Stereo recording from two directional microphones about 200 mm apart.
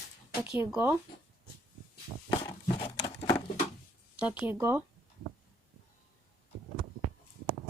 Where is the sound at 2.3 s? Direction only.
20° left (ahead or behind).